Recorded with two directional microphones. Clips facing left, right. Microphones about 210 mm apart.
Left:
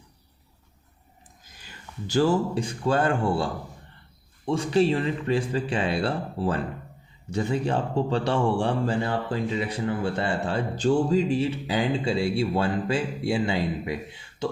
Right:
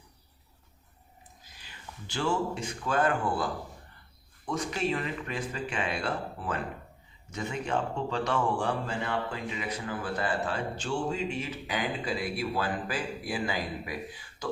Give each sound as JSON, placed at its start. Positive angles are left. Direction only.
{"t": 1.5, "sound": "a man's voice", "side_deg": 45}